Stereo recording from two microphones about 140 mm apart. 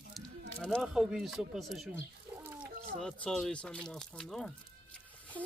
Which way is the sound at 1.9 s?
15° right (ahead or behind).